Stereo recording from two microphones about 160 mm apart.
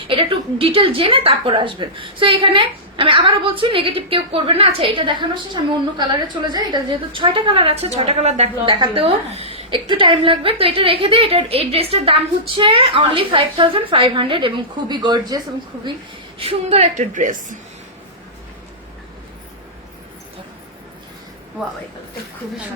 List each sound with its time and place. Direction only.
0.1 s a woman's voice: 35° right (ahead or behind)
16.4 s a woman's voice: 40° right (ahead or behind)